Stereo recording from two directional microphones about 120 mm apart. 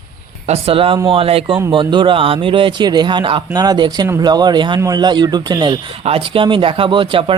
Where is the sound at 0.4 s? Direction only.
55° right (ahead or behind); by 5.7 s 35° right (ahead or behind).